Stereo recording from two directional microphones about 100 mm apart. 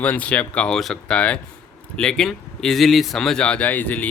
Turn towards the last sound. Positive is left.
turn(degrees=15)  # may be behind; listen again after turning